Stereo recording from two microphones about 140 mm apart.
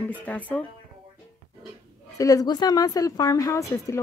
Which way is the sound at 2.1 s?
25° left (ahead or behind).